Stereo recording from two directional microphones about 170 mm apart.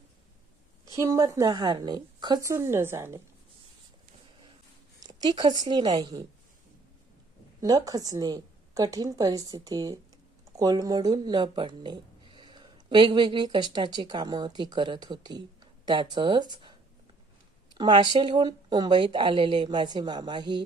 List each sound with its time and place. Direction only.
0.9 s speech: 20° right (ahead or behind)
4.9 s a woman's voice: 25° right (ahead or behind)
7.6 s speech: 20° right (ahead or behind)
17.7 s speech: 25° right (ahead or behind)